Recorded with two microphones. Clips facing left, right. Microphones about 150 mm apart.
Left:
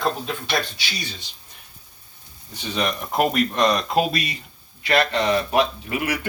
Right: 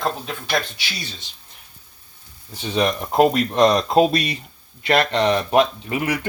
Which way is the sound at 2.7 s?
30° right (ahead or behind).